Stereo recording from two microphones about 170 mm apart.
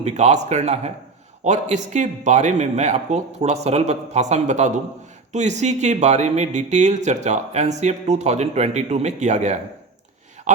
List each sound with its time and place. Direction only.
0.0 s speech: 40° right (ahead or behind)